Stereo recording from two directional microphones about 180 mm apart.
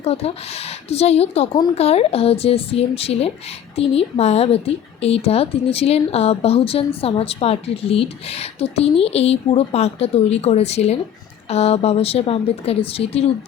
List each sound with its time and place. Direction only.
0.0 s speech: 35° left (ahead or behind)